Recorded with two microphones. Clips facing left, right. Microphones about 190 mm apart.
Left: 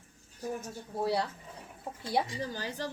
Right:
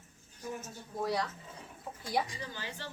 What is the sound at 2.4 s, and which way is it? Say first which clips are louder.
Speech: left 7 dB; 40° left (ahead or behind).